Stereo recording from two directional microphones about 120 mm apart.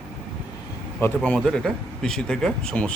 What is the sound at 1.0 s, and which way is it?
A man's voice, 15° left (ahead or behind).